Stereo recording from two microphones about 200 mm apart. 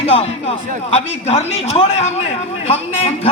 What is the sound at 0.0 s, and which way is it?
A man's voice, 30° left (ahead or behind).